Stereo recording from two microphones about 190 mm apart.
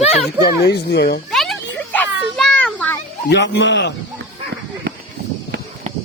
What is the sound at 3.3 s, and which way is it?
Speech, 65° left (ahead or behind).